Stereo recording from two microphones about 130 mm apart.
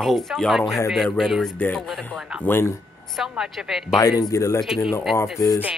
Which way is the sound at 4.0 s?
30° left (ahead or behind).